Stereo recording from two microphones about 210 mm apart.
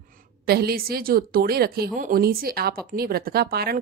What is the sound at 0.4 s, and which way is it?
Speech, 50° right (ahead or behind).